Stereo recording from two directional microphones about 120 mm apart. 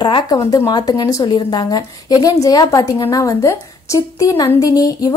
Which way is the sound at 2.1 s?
30° left (ahead or behind).